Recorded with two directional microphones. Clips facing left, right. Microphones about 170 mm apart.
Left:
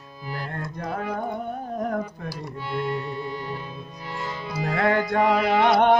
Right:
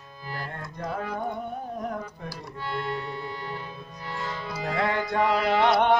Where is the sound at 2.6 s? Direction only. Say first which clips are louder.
Left 3 dB; 10° left (ahead or behind).